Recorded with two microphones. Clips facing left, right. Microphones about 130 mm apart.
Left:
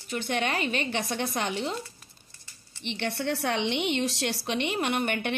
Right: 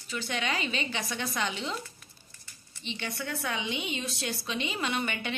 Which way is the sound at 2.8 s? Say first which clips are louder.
Left 6 dB; 65° left (ahead or behind).